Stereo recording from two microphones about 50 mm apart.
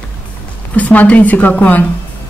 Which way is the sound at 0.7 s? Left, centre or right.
Left.